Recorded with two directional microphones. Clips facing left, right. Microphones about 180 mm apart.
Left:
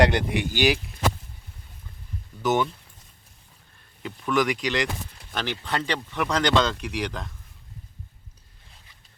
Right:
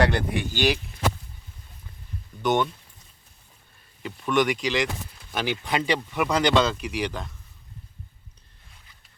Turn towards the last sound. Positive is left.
turn(degrees=0)  # may be behind; listen again after turning